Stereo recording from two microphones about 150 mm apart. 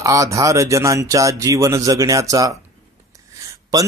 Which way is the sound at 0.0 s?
20° right (ahead or behind).